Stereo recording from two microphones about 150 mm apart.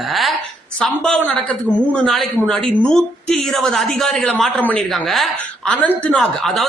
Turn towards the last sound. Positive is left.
turn(degrees=0)  # may be behind; listen again after turning